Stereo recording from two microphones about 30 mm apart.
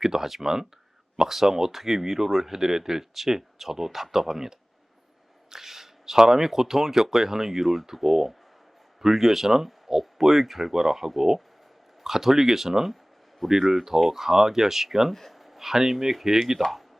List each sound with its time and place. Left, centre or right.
0.0 s speech: centre
15.1 s a sound: centre
15.6 s speech: centre
16.6 s speech: centre